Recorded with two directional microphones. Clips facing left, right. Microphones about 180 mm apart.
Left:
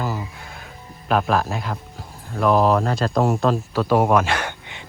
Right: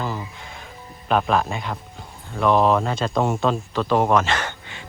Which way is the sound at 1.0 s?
Centre (ahead or behind).